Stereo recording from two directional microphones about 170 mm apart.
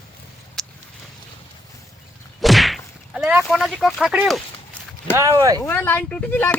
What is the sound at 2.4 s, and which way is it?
Whip, centre (ahead or behind).